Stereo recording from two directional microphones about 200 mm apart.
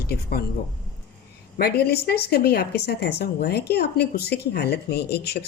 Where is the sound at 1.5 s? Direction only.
50° left (ahead or behind).